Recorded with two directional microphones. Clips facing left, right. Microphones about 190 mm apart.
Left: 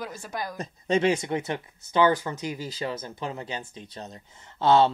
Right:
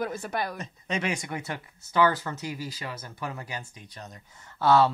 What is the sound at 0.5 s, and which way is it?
Speech, 30° left (ahead or behind).